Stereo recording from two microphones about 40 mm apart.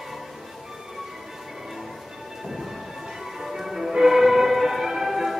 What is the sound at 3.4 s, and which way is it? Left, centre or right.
Music, centre.